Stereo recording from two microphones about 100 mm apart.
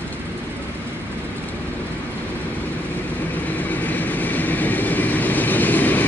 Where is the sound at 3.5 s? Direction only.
15° left (ahead or behind).